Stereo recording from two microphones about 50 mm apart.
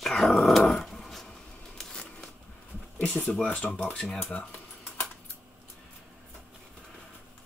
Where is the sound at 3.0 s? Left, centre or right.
Left.